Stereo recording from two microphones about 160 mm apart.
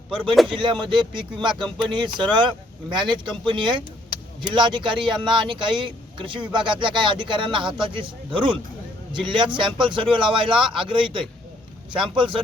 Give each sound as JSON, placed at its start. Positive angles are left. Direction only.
{"t": 0.5, "sound": "speech", "side_deg": -30}